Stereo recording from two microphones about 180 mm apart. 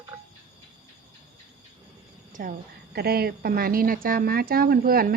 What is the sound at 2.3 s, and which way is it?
A woman's voice, 50° right (ahead or behind).